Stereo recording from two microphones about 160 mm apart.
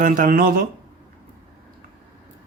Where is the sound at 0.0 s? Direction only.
55° right (ahead or behind).